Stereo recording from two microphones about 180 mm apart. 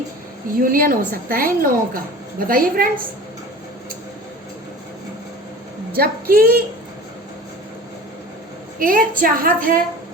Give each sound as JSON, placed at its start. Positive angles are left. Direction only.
{"t": 0.6, "sound": "a woman's voice", "side_deg": -50}
{"t": 5.9, "sound": "a woman's voice", "side_deg": -55}
{"t": 8.8, "sound": "a woman's voice", "side_deg": -50}